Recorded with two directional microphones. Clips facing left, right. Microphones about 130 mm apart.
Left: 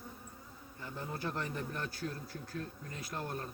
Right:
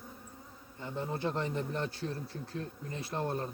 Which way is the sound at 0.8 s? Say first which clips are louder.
Right 5 dB; 25° right (ahead or behind).